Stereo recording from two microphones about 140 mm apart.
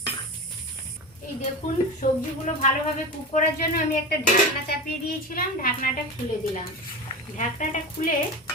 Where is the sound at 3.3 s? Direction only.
80° left.